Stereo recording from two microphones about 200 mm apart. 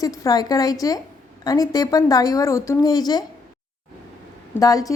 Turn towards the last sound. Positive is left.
turn(degrees=15)  # may be behind; listen again after turning